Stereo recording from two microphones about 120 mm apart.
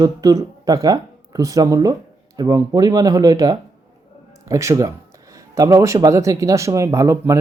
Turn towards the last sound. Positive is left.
turn(degrees=-25)  # may be behind; listen again after turning